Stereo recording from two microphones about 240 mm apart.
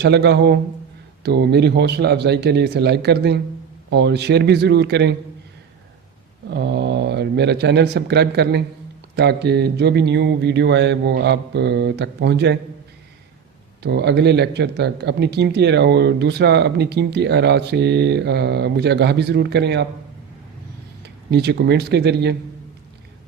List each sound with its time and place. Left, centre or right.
0.0 s speech: right
6.5 s speech: right
13.8 s speech: right
21.0 s speech: right